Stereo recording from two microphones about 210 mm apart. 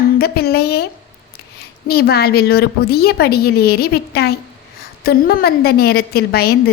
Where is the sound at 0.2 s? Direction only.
50° left (ahead or behind).